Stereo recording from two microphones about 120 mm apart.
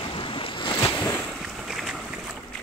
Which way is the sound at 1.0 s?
15° left (ahead or behind).